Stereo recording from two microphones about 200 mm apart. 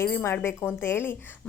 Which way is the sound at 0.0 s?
10° left (ahead or behind).